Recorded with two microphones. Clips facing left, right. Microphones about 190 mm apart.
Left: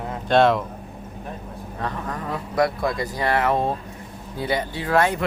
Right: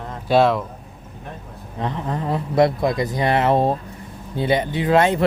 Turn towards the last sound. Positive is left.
turn(degrees=-25)  # may be behind; listen again after turning